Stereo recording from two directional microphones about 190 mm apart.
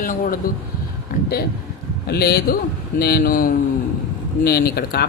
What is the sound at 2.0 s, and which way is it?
Speech, 55° left (ahead or behind).